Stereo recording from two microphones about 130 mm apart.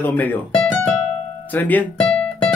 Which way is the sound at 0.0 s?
15° left (ahead or behind).